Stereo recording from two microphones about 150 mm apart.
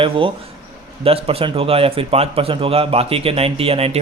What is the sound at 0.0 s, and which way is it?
A man's voice, 35° right (ahead or behind).